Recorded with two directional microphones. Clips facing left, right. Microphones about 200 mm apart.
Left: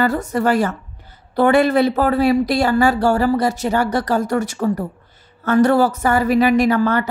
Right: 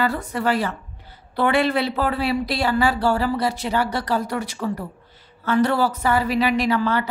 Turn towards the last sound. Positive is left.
turn(degrees=45)  # may be behind; listen again after turning